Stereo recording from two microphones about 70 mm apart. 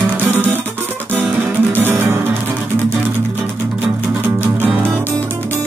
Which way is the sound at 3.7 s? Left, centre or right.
Right.